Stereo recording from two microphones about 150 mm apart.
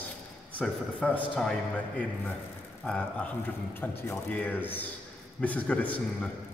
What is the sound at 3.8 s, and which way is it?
A man's voice, 15° left (ahead or behind).